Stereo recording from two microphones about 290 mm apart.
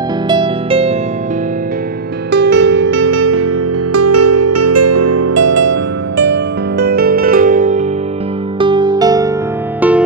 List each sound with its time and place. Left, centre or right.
0.3 s music: centre
2.3 s music: right
6.1 s music: right
8.5 s music: centre